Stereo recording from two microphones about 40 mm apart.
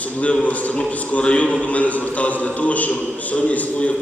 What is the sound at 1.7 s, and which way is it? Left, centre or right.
A man's voice, left.